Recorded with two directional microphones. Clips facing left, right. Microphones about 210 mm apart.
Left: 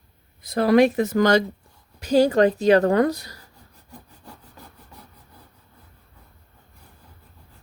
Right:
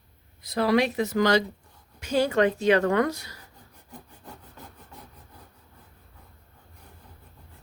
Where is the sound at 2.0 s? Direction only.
35° left (ahead or behind).